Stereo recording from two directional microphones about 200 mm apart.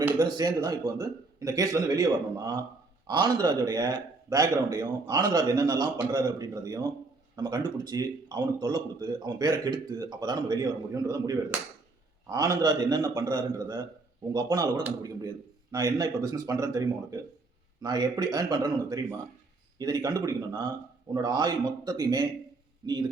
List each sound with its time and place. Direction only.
0.0 s speech: 20° right (ahead or behind)